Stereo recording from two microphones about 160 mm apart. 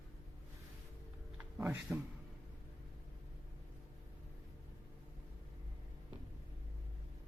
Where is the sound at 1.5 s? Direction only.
10° right (ahead or behind).